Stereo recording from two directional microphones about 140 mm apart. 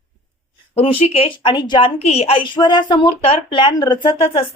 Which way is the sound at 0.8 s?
45° left (ahead or behind).